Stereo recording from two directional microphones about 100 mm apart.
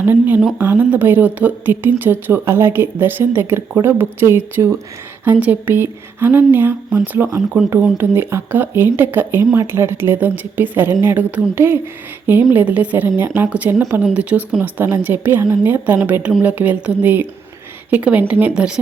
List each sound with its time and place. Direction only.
0.0 s a woman's voice: 20° right (ahead or behind)